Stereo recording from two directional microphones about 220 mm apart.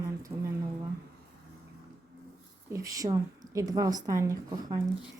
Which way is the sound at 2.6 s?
15° right (ahead or behind).